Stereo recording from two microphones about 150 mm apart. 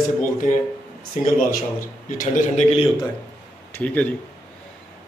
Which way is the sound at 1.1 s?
55° left (ahead or behind).